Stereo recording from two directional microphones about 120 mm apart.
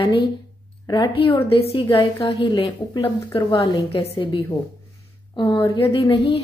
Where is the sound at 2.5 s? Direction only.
40° left (ahead or behind).